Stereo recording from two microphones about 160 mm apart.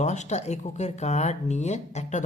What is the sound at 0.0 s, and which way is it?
Speech, 45° left (ahead or behind).